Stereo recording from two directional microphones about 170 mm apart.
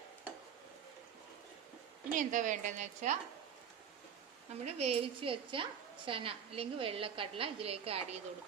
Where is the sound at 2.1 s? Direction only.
50° right (ahead or behind).